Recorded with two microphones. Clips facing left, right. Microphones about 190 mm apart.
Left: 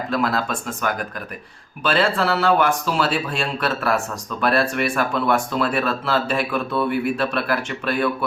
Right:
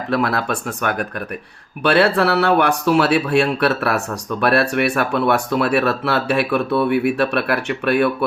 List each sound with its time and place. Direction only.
0.1 s speech: 65° right (ahead or behind)